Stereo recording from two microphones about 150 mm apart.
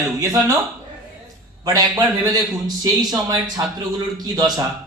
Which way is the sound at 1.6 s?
25° right (ahead or behind).